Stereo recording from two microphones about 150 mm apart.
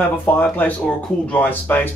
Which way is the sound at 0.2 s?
15° left (ahead or behind).